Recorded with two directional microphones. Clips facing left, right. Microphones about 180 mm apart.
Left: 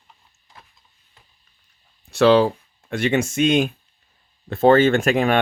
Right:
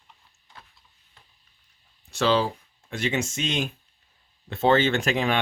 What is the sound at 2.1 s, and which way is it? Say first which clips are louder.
Speech: left 8 dB; 60° left (ahead or behind).